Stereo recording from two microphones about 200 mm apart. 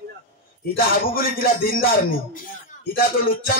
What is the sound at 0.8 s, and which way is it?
A man's voice, 45° left (ahead or behind).